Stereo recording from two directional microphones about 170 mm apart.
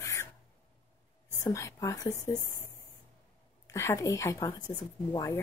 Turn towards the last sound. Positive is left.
turn(degrees=20)  # may be behind; listen again after turning